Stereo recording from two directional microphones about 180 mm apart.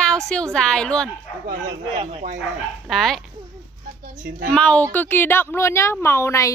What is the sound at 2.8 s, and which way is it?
Speech, centre (ahead or behind).